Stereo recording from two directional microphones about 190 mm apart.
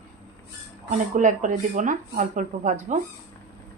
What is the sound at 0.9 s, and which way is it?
Speech, 40° right (ahead or behind).